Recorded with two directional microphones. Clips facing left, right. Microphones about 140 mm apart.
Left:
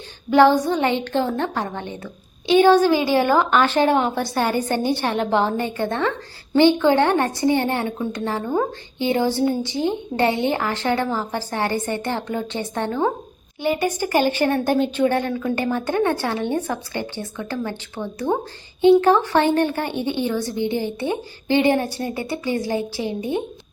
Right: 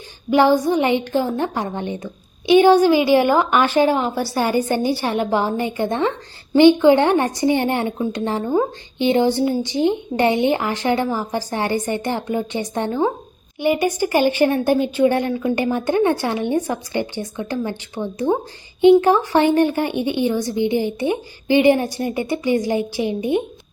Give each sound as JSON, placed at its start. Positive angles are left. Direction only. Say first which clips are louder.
{"t": 0.3, "sound": "a woman's voice", "louder": "even", "side_deg": -10}
{"t": 3.8, "sound": "a woman's voice", "louder": "even", "side_deg": 0}